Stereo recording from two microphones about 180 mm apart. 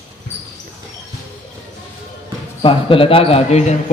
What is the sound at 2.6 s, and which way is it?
Speech, 30° left (ahead or behind).